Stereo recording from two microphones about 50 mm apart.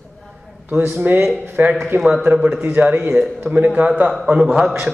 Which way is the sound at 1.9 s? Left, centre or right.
Right.